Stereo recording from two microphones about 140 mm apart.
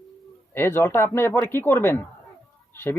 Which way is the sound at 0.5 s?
15° left (ahead or behind).